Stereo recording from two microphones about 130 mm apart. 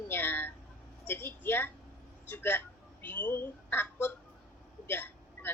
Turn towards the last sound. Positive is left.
turn(degrees=15)  # may be behind; listen again after turning